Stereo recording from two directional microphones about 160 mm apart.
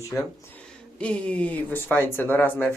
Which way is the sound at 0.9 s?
5° left (ahead or behind).